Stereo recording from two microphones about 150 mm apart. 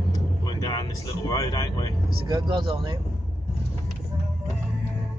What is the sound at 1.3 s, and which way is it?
Speech, 25° left (ahead or behind).